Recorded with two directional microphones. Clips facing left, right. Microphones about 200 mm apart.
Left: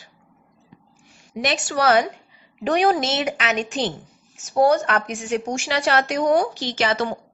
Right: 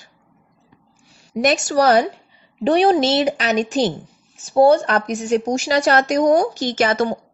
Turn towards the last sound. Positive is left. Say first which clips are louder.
# right 4 dB
turn(degrees=-45)  # may be behind; listen again after turning